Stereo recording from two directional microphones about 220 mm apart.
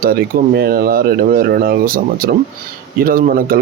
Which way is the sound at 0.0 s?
45° right (ahead or behind).